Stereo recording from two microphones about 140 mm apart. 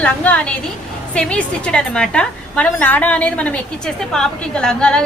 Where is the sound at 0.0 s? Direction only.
10° left (ahead or behind).